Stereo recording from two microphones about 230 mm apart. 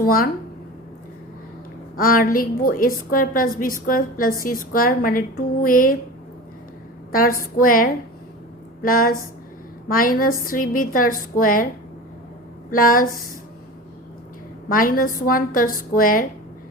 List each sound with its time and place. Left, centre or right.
0.0 s a woman's voice: left
2.0 s a woman's voice: left
7.1 s a woman's voice: left
12.7 s a woman's voice: left
14.7 s a woman's voice: left